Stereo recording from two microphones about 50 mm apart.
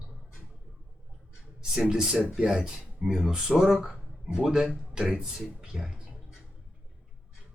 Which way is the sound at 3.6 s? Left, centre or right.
Centre.